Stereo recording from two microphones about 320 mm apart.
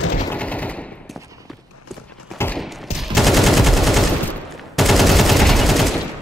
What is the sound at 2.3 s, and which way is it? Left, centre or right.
Fusillade, centre.